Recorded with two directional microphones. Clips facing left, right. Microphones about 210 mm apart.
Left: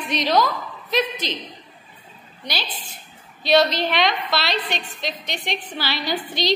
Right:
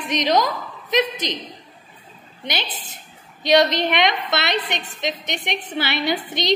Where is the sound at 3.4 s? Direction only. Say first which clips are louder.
Right 1 dB; 20° right (ahead or behind).